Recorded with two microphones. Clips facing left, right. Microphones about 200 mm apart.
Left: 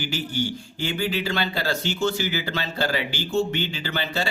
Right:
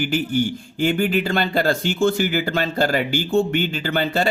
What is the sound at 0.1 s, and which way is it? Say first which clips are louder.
Speech: right 7 dB; 50° right (ahead or behind).